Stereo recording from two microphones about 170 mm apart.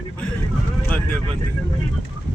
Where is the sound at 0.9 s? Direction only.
5° left (ahead or behind).